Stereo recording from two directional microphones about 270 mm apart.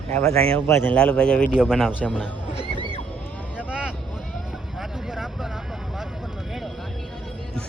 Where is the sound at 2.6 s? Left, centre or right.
Centre.